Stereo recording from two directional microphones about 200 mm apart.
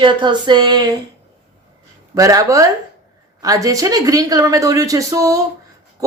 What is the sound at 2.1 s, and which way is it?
A woman's voice, 15° right (ahead or behind).